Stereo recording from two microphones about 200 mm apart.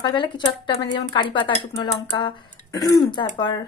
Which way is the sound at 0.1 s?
25° left (ahead or behind).